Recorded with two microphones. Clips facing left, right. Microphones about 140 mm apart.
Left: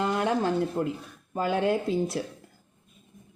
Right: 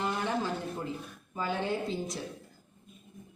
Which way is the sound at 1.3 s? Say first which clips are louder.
Left 7 dB; 70° left (ahead or behind).